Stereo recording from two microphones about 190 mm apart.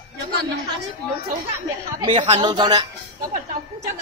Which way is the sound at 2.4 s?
25° right (ahead or behind).